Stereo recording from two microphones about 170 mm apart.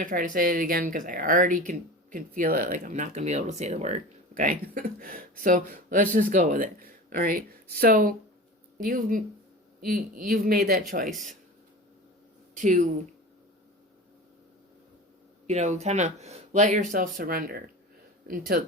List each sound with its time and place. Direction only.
0.0 s speech: 50° right (ahead or behind)
4.4 s speech: 55° right (ahead or behind)
12.5 s speech: 45° right (ahead or behind)
15.4 s speech: 45° right (ahead or behind); by 18.6 s 60° right (ahead or behind)